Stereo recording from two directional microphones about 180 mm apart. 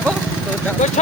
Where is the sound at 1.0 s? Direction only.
40° left (ahead or behind).